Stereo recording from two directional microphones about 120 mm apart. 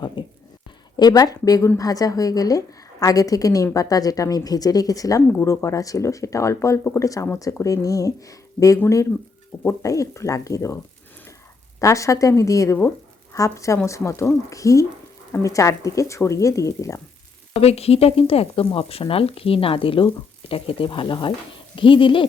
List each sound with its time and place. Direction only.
0.2 s a sound: 40° left (ahead or behind)
0.9 s a woman's voice: 35° left (ahead or behind)
5.3 s a woman's voice: 20° left (ahead or behind)
11.8 s a woman's voice: 25° left (ahead or behind)
17.5 s speech: 60° left (ahead or behind)